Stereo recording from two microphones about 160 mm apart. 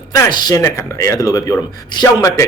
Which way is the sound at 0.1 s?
25° left (ahead or behind).